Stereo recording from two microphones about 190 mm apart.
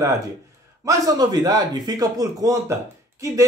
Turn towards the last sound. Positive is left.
turn(degrees=-15)  # may be behind; listen again after turning